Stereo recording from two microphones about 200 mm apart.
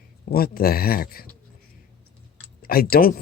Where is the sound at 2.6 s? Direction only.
50° left (ahead or behind).